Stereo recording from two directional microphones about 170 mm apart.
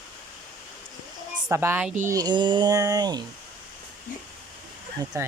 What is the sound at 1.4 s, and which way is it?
Speech, 15° right (ahead or behind).